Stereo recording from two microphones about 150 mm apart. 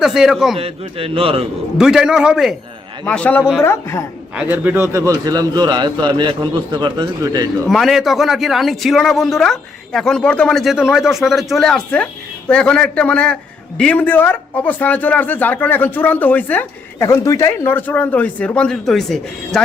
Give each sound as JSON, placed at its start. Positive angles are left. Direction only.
{"t": 0.0, "sound": "speech", "side_deg": -5}
{"t": 0.6, "sound": "a man's voice", "side_deg": -40}
{"t": 1.8, "sound": "speech", "side_deg": -5}
{"t": 3.0, "sound": "a man's voice", "side_deg": 10}
{"t": 4.4, "sound": "a man's voice", "side_deg": -10}
{"t": 7.7, "sound": "a man's voice", "side_deg": 0}